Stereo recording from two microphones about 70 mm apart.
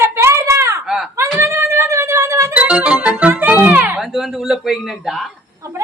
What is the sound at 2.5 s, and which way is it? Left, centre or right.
Music, centre.